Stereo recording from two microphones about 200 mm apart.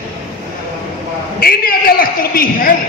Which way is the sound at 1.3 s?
50° left (ahead or behind).